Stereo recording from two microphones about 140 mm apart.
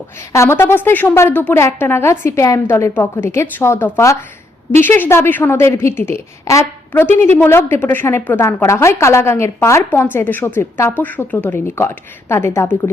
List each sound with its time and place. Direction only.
0.3 s a woman's voice: 20° left (ahead or behind)